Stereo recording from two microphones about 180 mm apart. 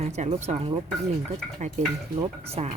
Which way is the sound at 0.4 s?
30° right (ahead or behind).